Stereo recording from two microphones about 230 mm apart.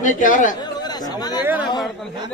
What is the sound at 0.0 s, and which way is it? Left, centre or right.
Speech, left.